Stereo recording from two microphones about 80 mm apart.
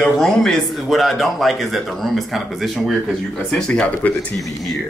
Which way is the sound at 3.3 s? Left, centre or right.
Centre.